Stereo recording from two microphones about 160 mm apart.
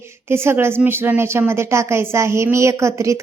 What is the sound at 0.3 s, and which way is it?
A woman's voice, 15° right (ahead or behind).